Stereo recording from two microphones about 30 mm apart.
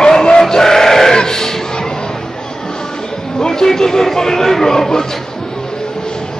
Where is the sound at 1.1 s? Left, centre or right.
Left.